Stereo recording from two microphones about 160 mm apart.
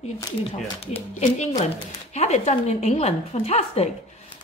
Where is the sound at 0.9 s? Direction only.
40° left (ahead or behind).